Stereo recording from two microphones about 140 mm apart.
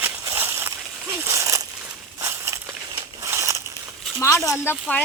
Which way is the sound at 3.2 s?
20° right (ahead or behind).